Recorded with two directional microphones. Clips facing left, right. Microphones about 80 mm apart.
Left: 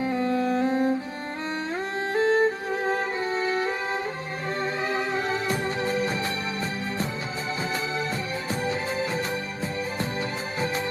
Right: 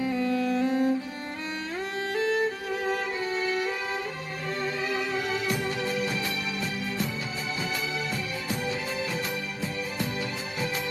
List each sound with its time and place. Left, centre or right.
0.0 s music: left
2.1 s music: left
8.6 s music: left